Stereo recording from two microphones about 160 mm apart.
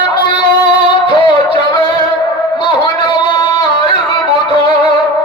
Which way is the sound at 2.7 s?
30° left (ahead or behind).